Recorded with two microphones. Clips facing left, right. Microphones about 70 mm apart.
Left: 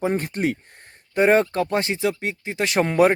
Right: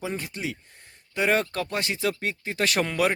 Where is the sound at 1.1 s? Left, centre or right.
Left.